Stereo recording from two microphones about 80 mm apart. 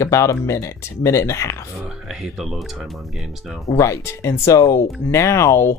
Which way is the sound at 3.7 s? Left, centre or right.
Left.